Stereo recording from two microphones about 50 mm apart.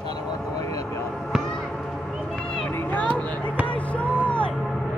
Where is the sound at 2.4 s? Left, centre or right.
Centre.